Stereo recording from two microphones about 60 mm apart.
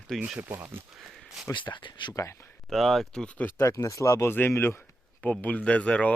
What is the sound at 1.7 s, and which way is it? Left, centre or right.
Speech, left.